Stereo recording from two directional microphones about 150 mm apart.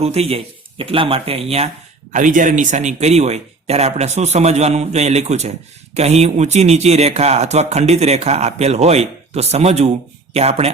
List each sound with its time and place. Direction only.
0.0 s speech: 45° right (ahead or behind)
2.1 s speech: 60° right (ahead or behind)